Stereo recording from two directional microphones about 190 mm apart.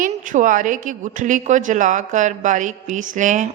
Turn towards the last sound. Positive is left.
turn(degrees=-40)  # may be behind; listen again after turning